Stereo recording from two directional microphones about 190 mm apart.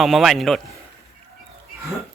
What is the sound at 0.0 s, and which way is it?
Speech, centre (ahead or behind).